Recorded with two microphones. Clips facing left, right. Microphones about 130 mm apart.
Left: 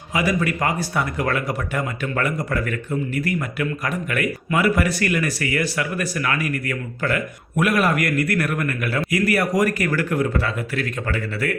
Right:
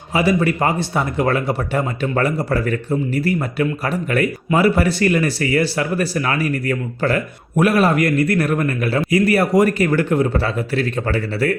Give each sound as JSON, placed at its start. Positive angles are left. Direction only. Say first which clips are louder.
{"t": 0.1, "sound": "speech", "louder": "right 5 dB", "side_deg": -30}